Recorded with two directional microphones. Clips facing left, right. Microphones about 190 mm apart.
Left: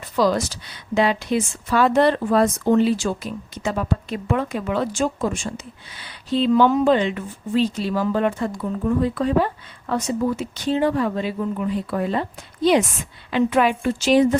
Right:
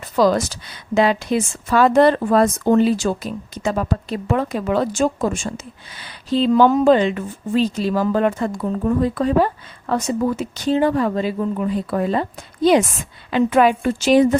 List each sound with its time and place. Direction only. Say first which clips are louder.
0.2 s a woman's voice: right 3 dB; 45° right (ahead or behind)
13.3 s a woman's voice: right 3 dB; 45° right (ahead or behind)